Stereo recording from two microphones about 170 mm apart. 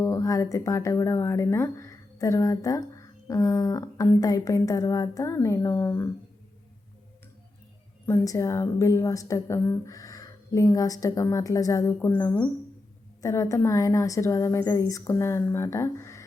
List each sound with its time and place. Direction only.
0.0 s speech: 20° left (ahead or behind)
8.0 s a woman's voice: 15° left (ahead or behind)